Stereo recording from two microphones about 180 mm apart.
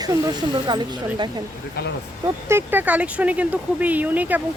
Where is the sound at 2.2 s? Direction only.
15° right (ahead or behind).